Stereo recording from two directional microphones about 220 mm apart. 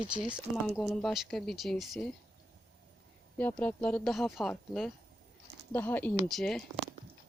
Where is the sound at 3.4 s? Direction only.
5° left (ahead or behind).